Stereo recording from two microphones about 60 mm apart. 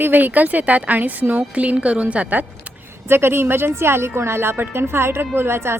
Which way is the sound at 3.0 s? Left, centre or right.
Right.